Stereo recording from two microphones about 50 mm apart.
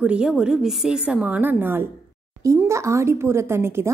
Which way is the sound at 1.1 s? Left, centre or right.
Right.